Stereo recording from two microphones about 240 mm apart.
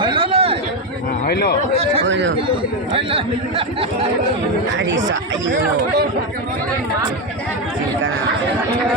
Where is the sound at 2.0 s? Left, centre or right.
Right.